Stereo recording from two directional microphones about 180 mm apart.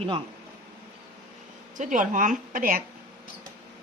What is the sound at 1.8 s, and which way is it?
A woman's voice, 45° right (ahead or behind).